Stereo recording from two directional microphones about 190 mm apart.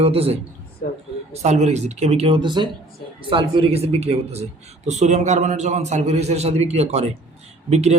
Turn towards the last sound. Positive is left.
turn(degrees=-35)  # may be behind; listen again after turning